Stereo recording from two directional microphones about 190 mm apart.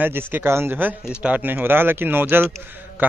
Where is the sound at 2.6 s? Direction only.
10° right (ahead or behind).